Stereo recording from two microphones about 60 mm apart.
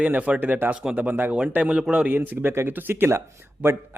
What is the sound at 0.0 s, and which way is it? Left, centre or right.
A man's voice, right.